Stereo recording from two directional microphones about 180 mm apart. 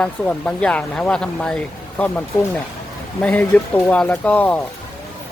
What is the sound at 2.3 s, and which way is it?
Speech, 15° left (ahead or behind).